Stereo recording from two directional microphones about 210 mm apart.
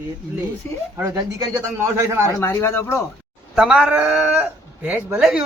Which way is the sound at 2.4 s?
10° left (ahead or behind).